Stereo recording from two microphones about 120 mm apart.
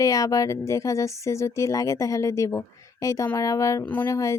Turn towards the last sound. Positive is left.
turn(degrees=25)  # may be behind; listen again after turning